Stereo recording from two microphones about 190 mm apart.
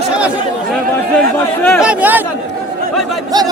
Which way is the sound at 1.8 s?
5° right (ahead or behind).